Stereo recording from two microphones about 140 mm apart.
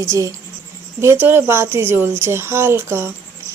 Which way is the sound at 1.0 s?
15° right (ahead or behind).